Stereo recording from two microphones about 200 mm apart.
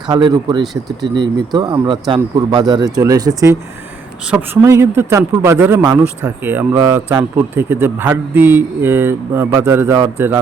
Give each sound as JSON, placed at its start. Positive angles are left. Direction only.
{"t": 0.1, "sound": "a man's voice", "side_deg": -20}